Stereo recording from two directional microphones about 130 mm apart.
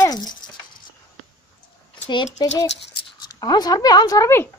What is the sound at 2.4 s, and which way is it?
Speech, 35° left (ahead or behind).